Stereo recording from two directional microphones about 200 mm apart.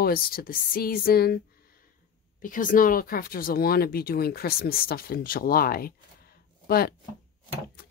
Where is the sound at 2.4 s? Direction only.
40° left (ahead or behind).